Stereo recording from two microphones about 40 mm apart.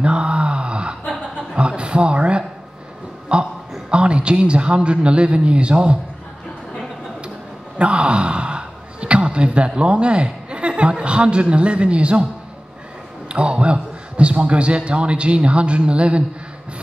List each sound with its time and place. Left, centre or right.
0.0 s groan: right
1.6 s a sound: right
3.9 s a man's voice: right
7.8 s speech: right
13.3 s a man's voice: right